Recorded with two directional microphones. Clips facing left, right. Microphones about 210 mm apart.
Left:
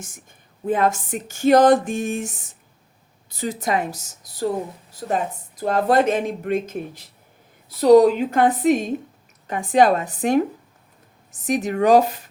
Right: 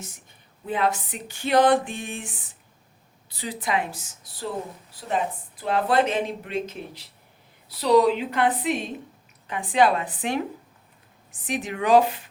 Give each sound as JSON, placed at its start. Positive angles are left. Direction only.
{"t": 0.0, "sound": "speech", "side_deg": 50}